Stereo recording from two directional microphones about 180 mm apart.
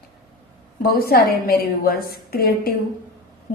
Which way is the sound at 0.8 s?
55° left (ahead or behind).